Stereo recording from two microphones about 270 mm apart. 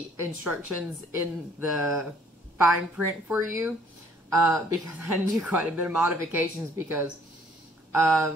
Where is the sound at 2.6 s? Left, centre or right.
Centre.